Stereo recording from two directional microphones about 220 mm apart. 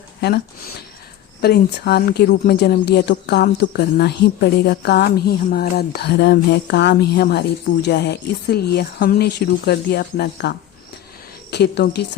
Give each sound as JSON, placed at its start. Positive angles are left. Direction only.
{"t": 1.4, "sound": "a woman's voice", "side_deg": 45}
{"t": 11.5, "sound": "a woman's voice", "side_deg": 50}